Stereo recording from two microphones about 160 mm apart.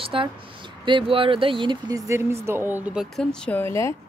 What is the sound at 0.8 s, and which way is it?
Speech, 35° right (ahead or behind).